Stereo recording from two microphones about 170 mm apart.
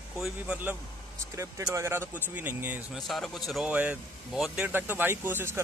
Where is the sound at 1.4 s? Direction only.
15° right (ahead or behind).